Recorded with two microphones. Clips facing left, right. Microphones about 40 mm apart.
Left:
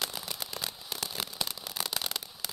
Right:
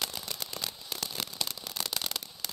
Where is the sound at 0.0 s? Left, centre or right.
Centre.